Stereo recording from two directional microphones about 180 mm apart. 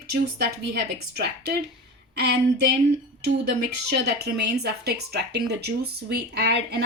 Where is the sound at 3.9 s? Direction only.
65° right (ahead or behind).